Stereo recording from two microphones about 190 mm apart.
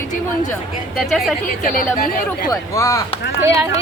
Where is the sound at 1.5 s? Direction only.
45° left (ahead or behind).